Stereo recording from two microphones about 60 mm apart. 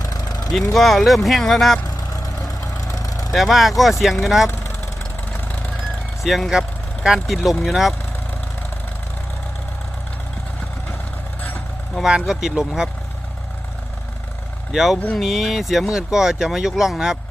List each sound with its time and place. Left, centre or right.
0.0 s vehicle: left
0.7 s speech: centre
2.8 s vehicle: left
3.3 s speech: centre
6.2 s speech: centre
12.3 s speech: centre
14.7 s speech: centre